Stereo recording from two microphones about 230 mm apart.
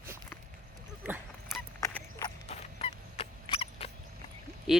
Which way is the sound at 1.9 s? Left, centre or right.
Centre.